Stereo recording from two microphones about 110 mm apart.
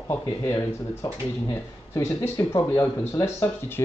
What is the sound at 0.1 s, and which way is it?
Speech, 25° left (ahead or behind).